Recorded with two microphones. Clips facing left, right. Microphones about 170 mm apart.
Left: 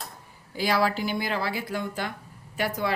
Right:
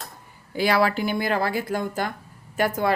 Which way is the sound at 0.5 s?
60° right (ahead or behind).